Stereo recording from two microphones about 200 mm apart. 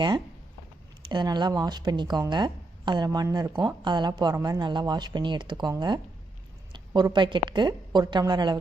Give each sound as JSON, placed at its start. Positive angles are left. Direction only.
{"t": 1.0, "sound": "speech", "side_deg": -20}